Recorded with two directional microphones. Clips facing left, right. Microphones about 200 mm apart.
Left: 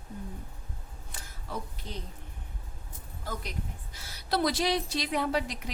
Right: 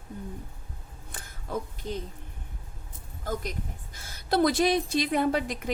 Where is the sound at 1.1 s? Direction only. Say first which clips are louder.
Right 5 dB; 50° right (ahead or behind).